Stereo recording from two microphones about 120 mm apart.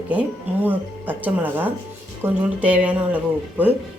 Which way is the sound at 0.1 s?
15° right (ahead or behind).